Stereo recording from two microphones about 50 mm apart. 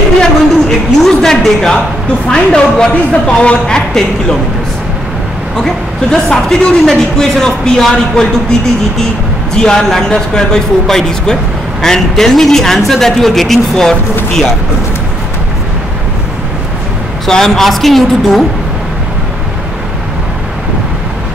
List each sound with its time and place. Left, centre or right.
0.2 s a woman's voice: centre
6.1 s speech: centre
9.5 s speech: centre
17.3 s a woman's voice: centre